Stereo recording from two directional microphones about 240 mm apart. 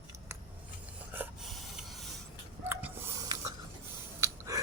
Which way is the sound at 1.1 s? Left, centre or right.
Centre.